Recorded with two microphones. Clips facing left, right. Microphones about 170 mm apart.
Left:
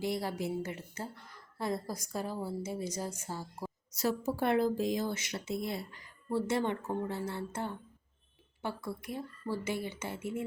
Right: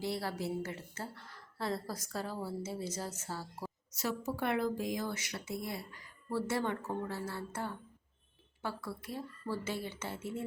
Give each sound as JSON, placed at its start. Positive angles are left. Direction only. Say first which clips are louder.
{"t": 0.0, "sound": "a woman's voice", "louder": "left 3 dB", "side_deg": 15}
{"t": 3.9, "sound": "a woman's voice", "louder": "left 5 dB", "side_deg": 35}